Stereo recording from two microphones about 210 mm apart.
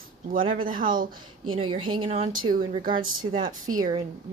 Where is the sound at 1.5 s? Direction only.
25° right (ahead or behind); by 3.7 s 40° right (ahead or behind).